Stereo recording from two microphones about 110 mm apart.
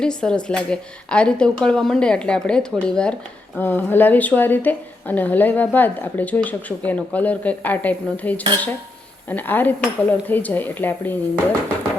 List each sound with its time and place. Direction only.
0.0 s a woman's voice: 5° left (ahead or behind)
3.6 s a woman's voice: 20° left (ahead or behind)